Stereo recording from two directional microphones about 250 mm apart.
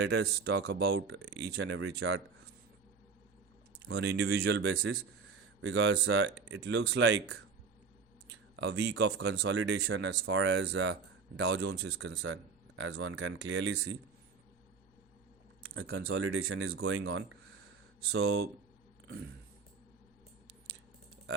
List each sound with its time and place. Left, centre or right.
0.0 s speech: right
3.8 s speech: right
8.3 s speech: right
15.7 s speech: right